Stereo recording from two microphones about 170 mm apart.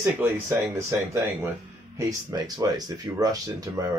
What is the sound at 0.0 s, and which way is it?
Speech, 15° right (ahead or behind).